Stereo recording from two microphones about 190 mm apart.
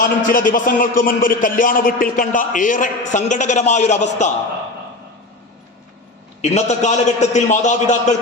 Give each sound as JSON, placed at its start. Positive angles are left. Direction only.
{"t": 0.0, "sound": "a man's voice", "side_deg": 45}
{"t": 6.4, "sound": "a man's voice", "side_deg": 35}